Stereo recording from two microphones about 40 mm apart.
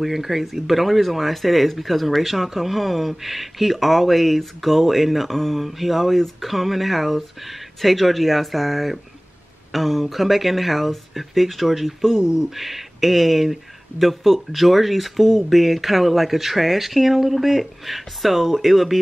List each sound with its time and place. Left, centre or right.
0.0 s speech: centre
12.2 s speech: centre
12.4 s speech: centre